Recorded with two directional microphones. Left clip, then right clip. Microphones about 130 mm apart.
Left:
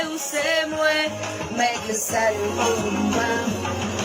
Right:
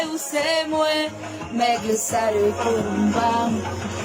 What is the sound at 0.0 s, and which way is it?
Music, 30° right (ahead or behind).